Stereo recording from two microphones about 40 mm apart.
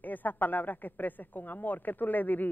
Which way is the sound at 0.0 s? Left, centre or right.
Left.